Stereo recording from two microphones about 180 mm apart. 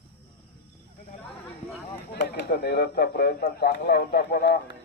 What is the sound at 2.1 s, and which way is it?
Speech, 65° left (ahead or behind).